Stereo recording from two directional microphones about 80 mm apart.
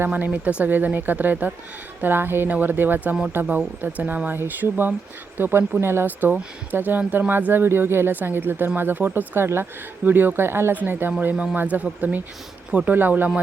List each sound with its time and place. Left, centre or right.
0.0 s speech: right